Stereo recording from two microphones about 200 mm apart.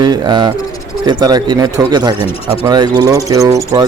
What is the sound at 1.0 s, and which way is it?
Speech, 20° right (ahead or behind).